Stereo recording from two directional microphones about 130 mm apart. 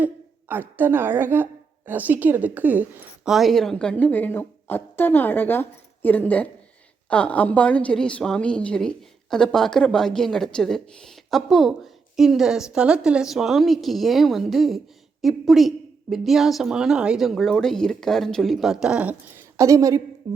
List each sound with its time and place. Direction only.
0.0 s a woman's voice: 15° right (ahead or behind)
3.2 s a woman's voice: centre (ahead or behind)
19.5 s a woman's voice: 25° right (ahead or behind)
20.2 s music: 30° right (ahead or behind)